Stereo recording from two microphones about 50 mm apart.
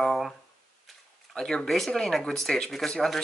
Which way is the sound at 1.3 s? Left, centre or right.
Centre.